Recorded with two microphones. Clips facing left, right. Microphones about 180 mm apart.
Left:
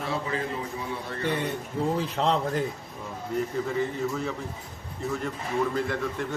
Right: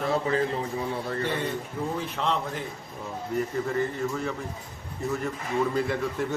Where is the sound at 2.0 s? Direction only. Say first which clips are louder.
Left 3 dB; 35° left (ahead or behind).